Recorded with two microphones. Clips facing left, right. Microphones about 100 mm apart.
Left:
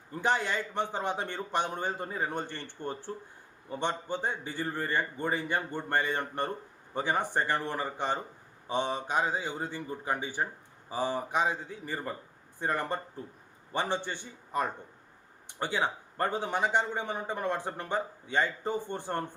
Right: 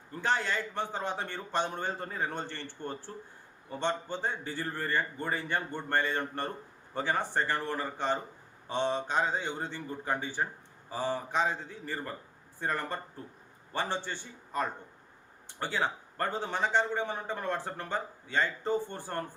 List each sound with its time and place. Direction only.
0.1 s a man's voice: 15° left (ahead or behind)